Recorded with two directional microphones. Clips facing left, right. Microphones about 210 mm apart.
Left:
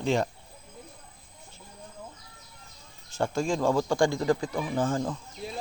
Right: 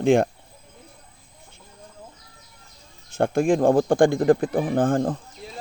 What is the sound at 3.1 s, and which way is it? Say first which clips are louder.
Speech: right 8 dB; 55° right (ahead or behind).